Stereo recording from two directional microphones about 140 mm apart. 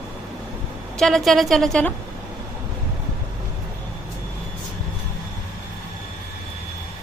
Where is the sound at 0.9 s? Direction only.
Centre (ahead or behind).